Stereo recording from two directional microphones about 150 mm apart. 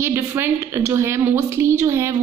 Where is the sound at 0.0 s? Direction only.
15° right (ahead or behind).